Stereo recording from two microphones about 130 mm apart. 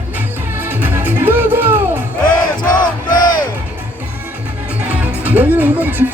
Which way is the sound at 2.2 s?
35° left (ahead or behind).